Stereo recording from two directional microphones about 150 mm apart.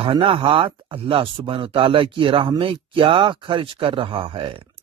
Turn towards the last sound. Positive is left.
turn(degrees=-35)  # may be behind; listen again after turning